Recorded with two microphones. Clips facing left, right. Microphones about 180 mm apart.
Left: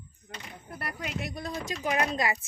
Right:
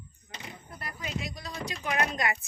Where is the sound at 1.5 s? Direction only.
40° left (ahead or behind).